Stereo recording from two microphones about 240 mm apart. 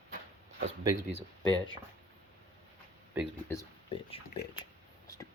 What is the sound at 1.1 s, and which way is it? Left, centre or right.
Speech, right.